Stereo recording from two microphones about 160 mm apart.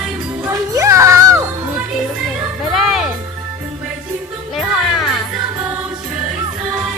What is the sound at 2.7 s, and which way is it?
Music, centre (ahead or behind).